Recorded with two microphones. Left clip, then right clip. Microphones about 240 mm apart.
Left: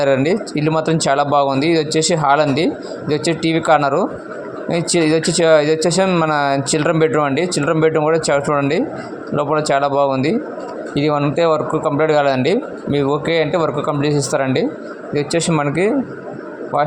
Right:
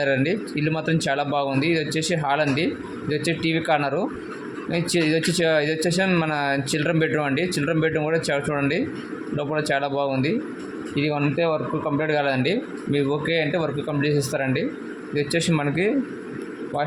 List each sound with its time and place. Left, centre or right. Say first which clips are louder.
0.0 s speech: left 7 dB; left